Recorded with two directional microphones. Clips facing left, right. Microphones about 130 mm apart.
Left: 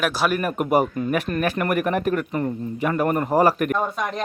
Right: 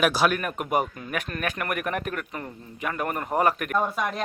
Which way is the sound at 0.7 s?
40° left (ahead or behind).